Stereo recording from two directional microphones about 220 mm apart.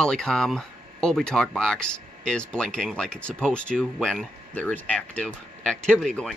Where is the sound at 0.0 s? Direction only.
5° left (ahead or behind).